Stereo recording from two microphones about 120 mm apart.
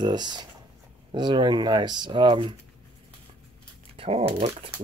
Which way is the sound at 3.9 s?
55° right (ahead or behind).